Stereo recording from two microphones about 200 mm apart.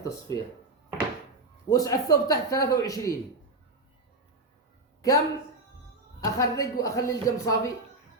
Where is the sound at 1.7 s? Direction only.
20° left (ahead or behind).